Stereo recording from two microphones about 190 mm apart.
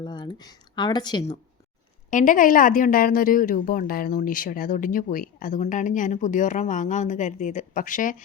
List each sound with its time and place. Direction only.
0.0 s speech: 25° left (ahead or behind)
2.0 s a woman's voice: 40° left (ahead or behind)